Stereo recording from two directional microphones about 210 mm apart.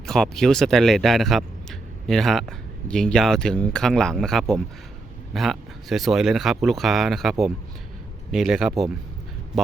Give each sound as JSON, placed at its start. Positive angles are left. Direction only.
{"t": 0.0, "sound": "speech", "side_deg": 0}